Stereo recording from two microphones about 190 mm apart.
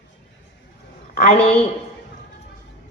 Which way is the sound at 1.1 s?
45° left (ahead or behind).